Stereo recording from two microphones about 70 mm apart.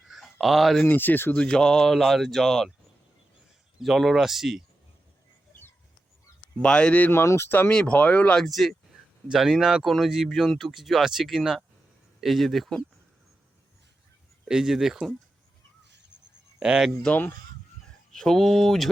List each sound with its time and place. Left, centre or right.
0.1 s a sound: centre
0.9 s speech: left
1.4 s speech: centre
3.8 s speech: centre
6.6 s speech: centre
7.1 s speech: left
7.7 s speech: centre
7.9 s speech: left
8.4 s speech: centre
14.4 s speech: centre
16.6 s speech: centre
17.1 s speech: left
18.1 s speech: centre